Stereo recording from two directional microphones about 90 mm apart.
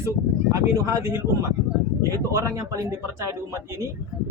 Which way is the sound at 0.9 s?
30° right (ahead or behind).